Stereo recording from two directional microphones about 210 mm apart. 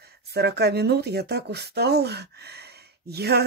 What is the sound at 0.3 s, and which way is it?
Speech, 50° right (ahead or behind).